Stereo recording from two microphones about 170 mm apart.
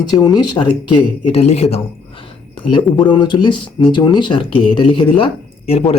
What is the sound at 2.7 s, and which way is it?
Speech, 25° left (ahead or behind).